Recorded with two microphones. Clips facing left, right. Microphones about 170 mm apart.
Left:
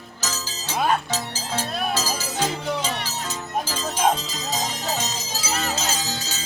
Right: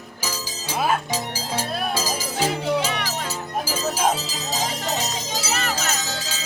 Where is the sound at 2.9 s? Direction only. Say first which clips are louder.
Right 2 dB; 65° right (ahead or behind).